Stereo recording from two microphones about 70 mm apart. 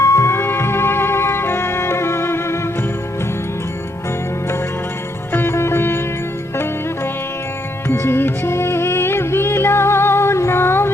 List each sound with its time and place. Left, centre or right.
0.0 s music: left
5.3 s sitar: left
7.9 s music: left